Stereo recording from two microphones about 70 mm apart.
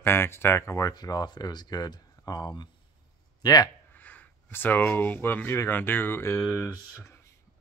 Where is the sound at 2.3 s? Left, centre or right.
Left.